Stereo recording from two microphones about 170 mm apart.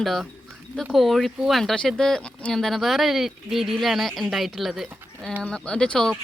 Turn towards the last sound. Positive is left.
turn(degrees=0)  # may be behind; listen again after turning